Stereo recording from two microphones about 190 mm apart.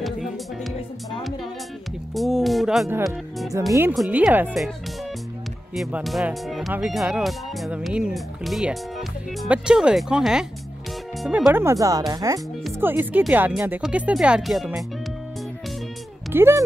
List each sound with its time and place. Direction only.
0.0 s music: centre (ahead or behind)
2.1 s speech: centre (ahead or behind)
2.9 s speech: 10° right (ahead or behind)
3.9 s speech: centre (ahead or behind)
5.8 s speech: 5° right (ahead or behind)
11.4 s speech: 15° right (ahead or behind)
16.3 s speech: 15° right (ahead or behind)